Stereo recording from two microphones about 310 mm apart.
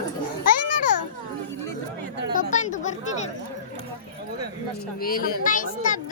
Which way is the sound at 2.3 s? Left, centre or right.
Left.